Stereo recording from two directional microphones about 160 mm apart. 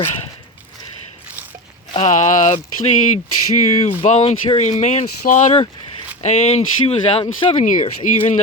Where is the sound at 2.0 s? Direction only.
50° left (ahead or behind).